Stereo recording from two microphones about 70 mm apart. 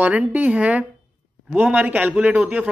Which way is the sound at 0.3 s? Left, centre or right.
Right.